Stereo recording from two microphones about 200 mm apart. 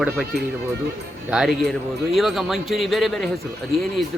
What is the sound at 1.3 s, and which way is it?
Speech, centre (ahead or behind).